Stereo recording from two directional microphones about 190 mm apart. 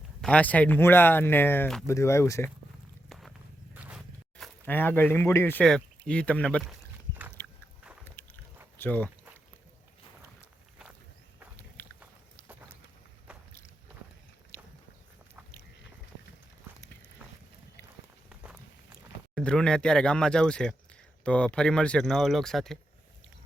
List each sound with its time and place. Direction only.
0.2 s speech: 5° left (ahead or behind)
3.1 s walk: centre (ahead or behind)
3.8 s speech: centre (ahead or behind)
7.1 s biting: 10° right (ahead or behind)
8.8 s speech: 10° left (ahead or behind)
11.8 s biting: 5° left (ahead or behind)
18.3 s walk: 5° right (ahead or behind)
19.3 s speech: 5° left (ahead or behind)